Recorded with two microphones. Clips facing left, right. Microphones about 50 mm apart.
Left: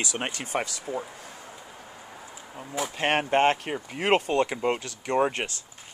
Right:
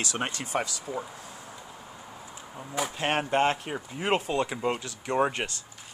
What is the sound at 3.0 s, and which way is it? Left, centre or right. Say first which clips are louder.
Speech: left 3 dB; left.